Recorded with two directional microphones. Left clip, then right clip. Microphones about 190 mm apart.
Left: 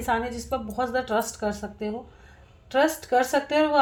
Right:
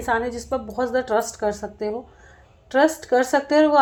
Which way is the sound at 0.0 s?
25° right (ahead or behind).